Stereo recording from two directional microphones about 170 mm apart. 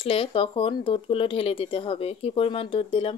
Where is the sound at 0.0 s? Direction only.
35° left (ahead or behind).